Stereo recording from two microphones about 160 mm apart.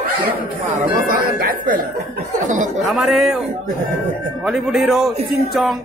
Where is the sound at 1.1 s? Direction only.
65° right (ahead or behind).